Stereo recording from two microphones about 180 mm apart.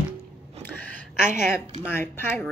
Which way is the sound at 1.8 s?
15° left (ahead or behind).